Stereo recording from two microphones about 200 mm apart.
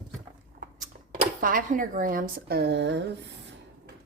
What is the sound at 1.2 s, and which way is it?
Speech, 40° right (ahead or behind).